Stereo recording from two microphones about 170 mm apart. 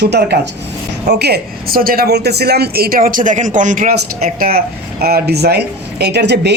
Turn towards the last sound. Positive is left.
turn(degrees=-80)